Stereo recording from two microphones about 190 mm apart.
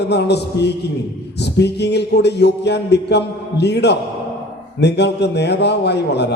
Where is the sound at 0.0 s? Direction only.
60° left (ahead or behind).